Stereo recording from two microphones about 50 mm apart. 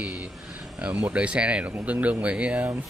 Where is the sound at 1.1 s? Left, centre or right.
Right.